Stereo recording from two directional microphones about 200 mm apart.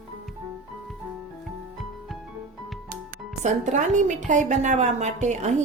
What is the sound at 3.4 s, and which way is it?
A woman's voice, 35° right (ahead or behind).